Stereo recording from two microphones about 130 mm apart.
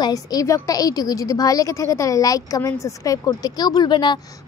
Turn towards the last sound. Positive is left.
turn(degrees=35)  # may be behind; listen again after turning